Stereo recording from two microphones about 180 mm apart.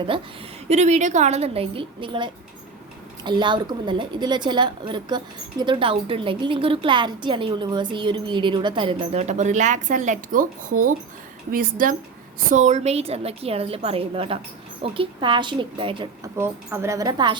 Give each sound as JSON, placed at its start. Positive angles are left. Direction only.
{"t": 0.7, "sound": "a woman's voice", "side_deg": -40}
{"t": 16.4, "sound": "a woman's voice", "side_deg": -15}